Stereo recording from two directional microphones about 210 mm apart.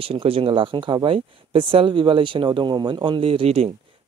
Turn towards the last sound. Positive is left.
turn(degrees=-30)  # may be behind; listen again after turning